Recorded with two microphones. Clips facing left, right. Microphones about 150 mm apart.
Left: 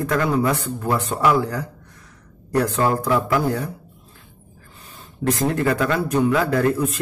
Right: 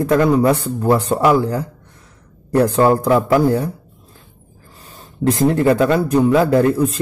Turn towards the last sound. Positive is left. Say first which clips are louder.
# right 5 dB
turn(degrees=-30)  # may be behind; listen again after turning